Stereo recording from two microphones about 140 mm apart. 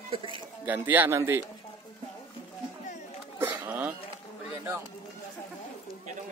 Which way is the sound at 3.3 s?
15° right (ahead or behind).